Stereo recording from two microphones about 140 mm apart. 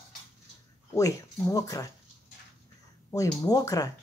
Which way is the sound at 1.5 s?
25° left (ahead or behind).